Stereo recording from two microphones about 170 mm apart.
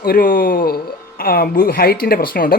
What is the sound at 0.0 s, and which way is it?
Speech, 60° left (ahead or behind).